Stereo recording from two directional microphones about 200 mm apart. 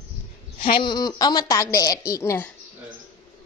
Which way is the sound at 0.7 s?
20° left (ahead or behind).